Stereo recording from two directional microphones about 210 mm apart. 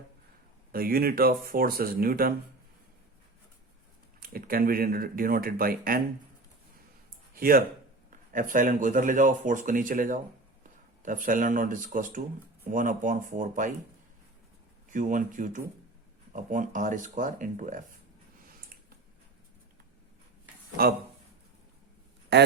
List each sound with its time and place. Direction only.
0.7 s speech: 45° right (ahead or behind)
4.2 s speech: 45° right (ahead or behind)
7.3 s speech: 45° right (ahead or behind)
14.8 s speech: 40° right (ahead or behind)
20.8 s speech: 45° right (ahead or behind)
22.3 s speech: 55° right (ahead or behind)